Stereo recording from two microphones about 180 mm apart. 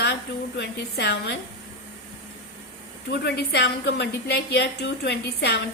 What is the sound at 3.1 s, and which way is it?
A woman's voice, 70° left (ahead or behind).